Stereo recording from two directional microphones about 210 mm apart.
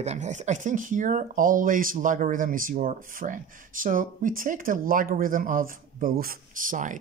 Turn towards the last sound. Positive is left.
turn(degrees=-40)  # may be behind; listen again after turning